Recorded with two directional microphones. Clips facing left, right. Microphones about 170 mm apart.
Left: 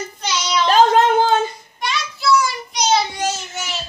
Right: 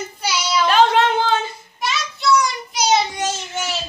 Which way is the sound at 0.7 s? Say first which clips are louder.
Left 2 dB; 40° left (ahead or behind).